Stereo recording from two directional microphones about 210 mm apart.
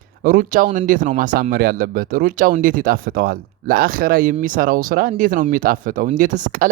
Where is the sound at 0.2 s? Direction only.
40° right (ahead or behind).